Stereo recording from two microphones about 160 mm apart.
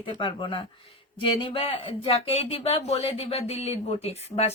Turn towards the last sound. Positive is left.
turn(degrees=40)  # may be behind; listen again after turning